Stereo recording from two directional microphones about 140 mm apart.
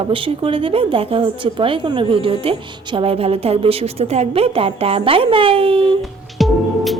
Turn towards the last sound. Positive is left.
turn(degrees=0)  # may be behind; listen again after turning